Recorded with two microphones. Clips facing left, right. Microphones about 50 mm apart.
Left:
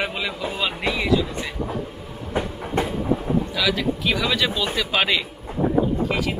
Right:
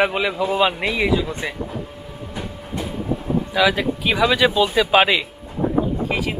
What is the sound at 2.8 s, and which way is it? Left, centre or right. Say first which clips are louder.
Train: left 5 dB; left.